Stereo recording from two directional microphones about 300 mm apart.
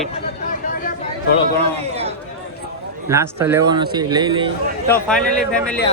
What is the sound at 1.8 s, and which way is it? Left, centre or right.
Speech, centre.